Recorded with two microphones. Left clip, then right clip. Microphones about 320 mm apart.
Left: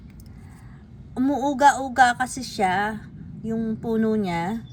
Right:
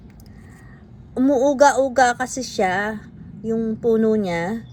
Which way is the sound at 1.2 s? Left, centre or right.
Centre.